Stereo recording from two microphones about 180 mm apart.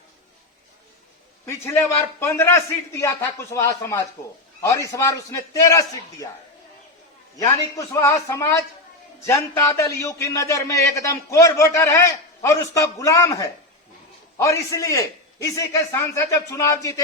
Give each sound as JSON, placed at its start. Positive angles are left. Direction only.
{"t": 1.5, "sound": "a man's voice", "side_deg": 15}
{"t": 7.3, "sound": "a man's voice", "side_deg": 20}